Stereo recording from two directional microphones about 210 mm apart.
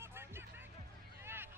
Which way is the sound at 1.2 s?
10° right (ahead or behind).